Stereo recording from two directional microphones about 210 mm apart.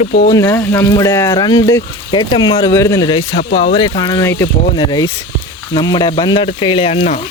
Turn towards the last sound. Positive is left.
turn(degrees=30)  # may be behind; listen again after turning